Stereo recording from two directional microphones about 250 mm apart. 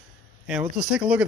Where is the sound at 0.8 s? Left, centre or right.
Centre.